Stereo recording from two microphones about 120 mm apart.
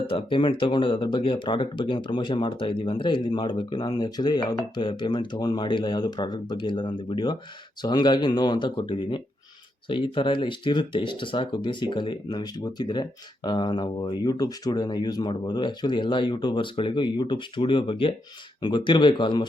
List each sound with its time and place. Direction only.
0.1 s speech: 45° left (ahead or behind)